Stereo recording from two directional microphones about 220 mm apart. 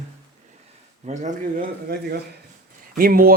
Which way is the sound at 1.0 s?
35° right (ahead or behind).